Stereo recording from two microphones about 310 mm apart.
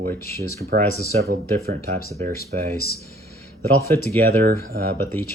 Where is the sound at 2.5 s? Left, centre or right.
Right.